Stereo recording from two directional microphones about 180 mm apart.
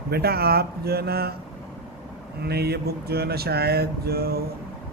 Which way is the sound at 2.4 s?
60° right (ahead or behind).